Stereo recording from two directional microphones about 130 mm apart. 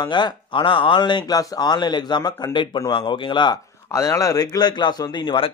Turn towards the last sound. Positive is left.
turn(degrees=40)  # may be behind; listen again after turning